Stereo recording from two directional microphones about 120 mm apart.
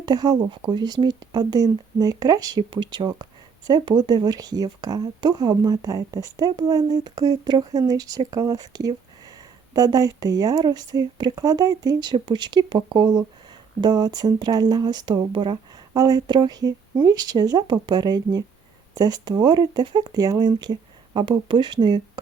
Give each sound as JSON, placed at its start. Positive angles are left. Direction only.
{"t": 0.0, "sound": "speech", "side_deg": -35}